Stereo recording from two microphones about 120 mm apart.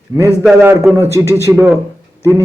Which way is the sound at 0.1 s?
20° right (ahead or behind).